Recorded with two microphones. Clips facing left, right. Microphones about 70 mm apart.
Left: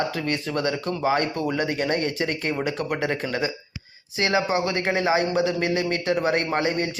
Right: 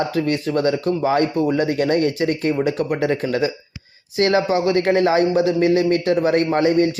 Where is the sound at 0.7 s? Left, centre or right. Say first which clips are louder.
Right 6 dB; left.